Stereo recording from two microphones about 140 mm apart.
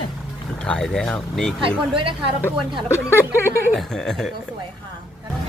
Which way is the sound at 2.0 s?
40° right (ahead or behind).